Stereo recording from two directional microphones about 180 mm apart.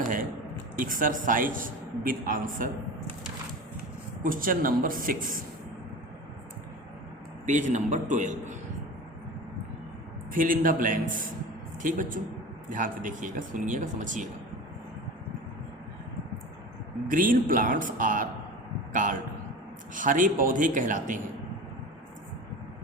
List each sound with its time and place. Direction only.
0.0 s a sound: 50° right (ahead or behind)
0.8 s a man's voice: 50° right (ahead or behind)
4.2 s a man's voice: 50° right (ahead or behind)
7.4 s a man's voice: 45° right (ahead or behind)
10.3 s a man's voice: 50° right (ahead or behind)
17.1 s a man's voice: 50° right (ahead or behind)
19.9 s a man's voice: 45° right (ahead or behind)